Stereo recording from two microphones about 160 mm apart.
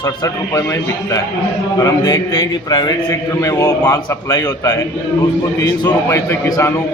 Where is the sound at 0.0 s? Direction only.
20° left (ahead or behind).